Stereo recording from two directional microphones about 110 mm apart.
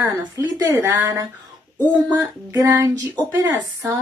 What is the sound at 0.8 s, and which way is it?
A woman's voice, 20° right (ahead or behind).